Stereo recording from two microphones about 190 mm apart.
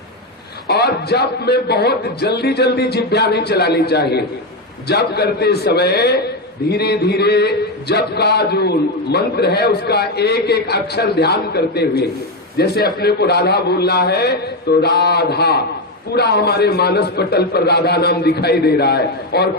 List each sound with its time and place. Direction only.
0.7 s a man's voice: 60° left (ahead or behind)